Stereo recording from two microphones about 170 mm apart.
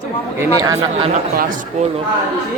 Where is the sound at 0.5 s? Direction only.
20° right (ahead or behind).